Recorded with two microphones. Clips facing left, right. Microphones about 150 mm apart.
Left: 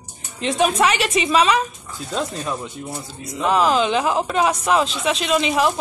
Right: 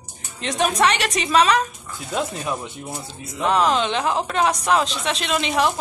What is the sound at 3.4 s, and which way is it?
Speech, centre (ahead or behind).